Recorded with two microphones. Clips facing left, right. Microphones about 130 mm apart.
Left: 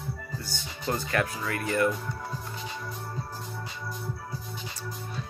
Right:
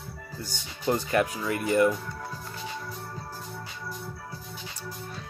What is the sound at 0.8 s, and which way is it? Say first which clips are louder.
Speech: right 4 dB; 10° right (ahead or behind).